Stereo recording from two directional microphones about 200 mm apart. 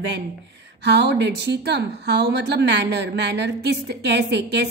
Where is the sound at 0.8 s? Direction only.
60° right (ahead or behind).